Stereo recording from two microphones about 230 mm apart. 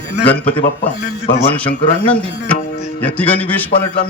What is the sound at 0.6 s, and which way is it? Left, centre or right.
Speech, left.